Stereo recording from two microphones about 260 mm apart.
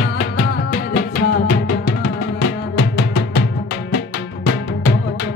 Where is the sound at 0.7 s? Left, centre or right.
Left.